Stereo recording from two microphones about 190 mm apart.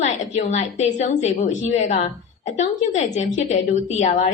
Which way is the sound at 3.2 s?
35° left (ahead or behind).